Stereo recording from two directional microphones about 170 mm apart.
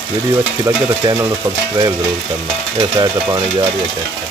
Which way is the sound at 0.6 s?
20° right (ahead or behind).